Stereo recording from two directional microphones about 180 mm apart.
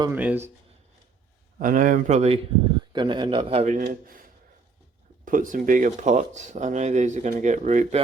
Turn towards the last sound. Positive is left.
turn(degrees=-40)  # may be behind; listen again after turning